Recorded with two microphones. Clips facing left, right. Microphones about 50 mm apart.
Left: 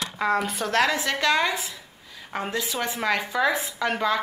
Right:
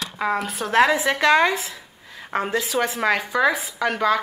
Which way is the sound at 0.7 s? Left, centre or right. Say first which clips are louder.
Right 6 dB; centre.